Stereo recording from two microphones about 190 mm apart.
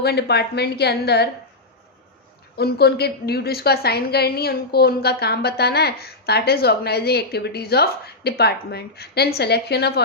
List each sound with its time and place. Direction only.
0.0 s a woman's voice: 60° left (ahead or behind)
2.6 s a woman's voice: 55° left (ahead or behind)